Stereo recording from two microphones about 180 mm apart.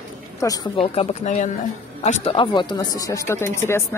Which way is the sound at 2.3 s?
25° left (ahead or behind).